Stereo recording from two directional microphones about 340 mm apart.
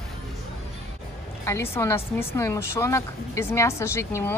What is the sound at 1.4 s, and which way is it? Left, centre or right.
Speech, centre.